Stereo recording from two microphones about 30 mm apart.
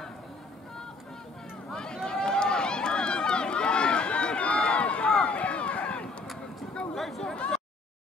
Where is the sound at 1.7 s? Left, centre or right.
Left.